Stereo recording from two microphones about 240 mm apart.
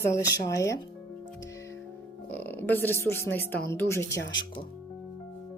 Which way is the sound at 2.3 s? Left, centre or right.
Centre.